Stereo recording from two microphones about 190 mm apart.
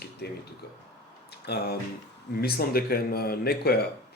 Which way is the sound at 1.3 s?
60° left (ahead or behind).